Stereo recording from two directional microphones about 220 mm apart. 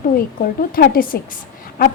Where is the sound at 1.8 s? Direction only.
45° left (ahead or behind).